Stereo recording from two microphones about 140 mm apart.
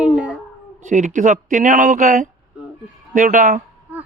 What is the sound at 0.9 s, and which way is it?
A man's voice, 65° right (ahead or behind).